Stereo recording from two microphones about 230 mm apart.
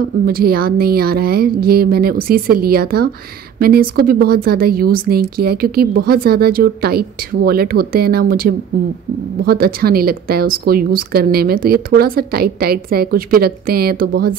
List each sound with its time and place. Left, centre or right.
0.3 s speech: right